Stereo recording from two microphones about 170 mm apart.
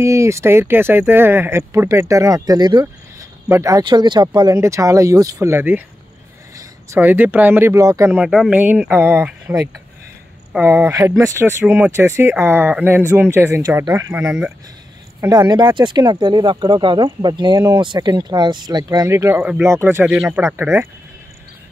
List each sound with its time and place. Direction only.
0.0 s speech: 15° right (ahead or behind)
15.1 s speech: 20° right (ahead or behind); by 20.5 s 5° right (ahead or behind)
20.5 s speech: 15° right (ahead or behind)